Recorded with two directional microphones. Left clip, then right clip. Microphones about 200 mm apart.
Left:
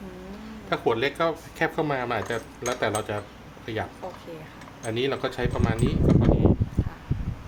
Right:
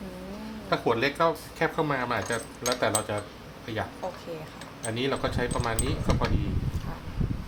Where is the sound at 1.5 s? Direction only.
30° left (ahead or behind).